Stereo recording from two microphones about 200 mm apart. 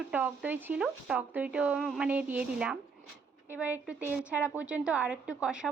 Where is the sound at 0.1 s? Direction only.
10° right (ahead or behind).